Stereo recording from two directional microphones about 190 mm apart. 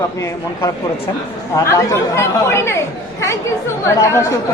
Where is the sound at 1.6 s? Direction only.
15° left (ahead or behind).